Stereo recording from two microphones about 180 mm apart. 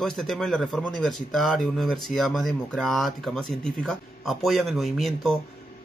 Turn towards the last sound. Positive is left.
turn(degrees=0)  # may be behind; listen again after turning